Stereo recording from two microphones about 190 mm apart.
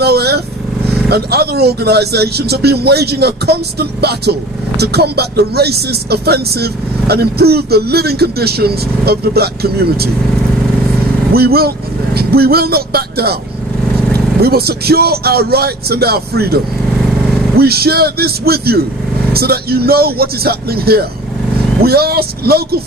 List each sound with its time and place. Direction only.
0.0 s vehicle: 60° right (ahead or behind)
1.1 s speech: 55° right (ahead or behind)
11.3 s speech: 55° right (ahead or behind)
17.6 s speech: 55° right (ahead or behind)